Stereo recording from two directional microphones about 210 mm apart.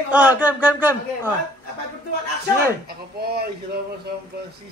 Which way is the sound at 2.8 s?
45° right (ahead or behind).